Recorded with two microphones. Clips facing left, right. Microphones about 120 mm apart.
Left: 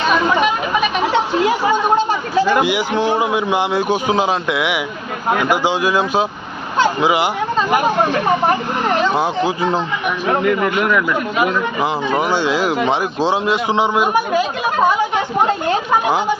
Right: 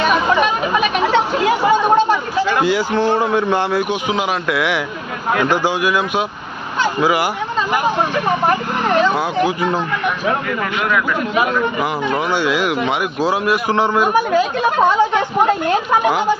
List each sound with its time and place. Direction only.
2.6 s a man's voice: 15° left (ahead or behind)
3.8 s speech: 35° left (ahead or behind)
4.4 s a man's voice: 20° left (ahead or behind)
5.8 s speech: 30° left (ahead or behind)
9.1 s speech: 25° left (ahead or behind)
11.8 s speech: 25° left (ahead or behind); by 15.2 s 10° left (ahead or behind)